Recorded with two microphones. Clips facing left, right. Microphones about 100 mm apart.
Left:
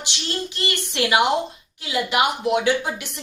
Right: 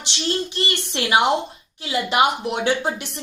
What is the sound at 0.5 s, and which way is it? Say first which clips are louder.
A woman's voice: right 1 dB; 25° right (ahead or behind).